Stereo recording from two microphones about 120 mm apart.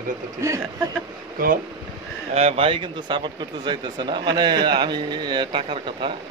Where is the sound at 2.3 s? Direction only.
55° right (ahead or behind).